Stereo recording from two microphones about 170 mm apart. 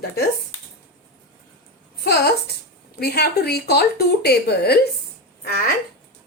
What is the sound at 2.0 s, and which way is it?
A woman's voice, 65° left (ahead or behind).